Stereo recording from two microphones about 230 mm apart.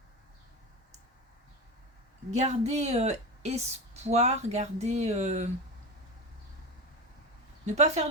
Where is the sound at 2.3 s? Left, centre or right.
Right.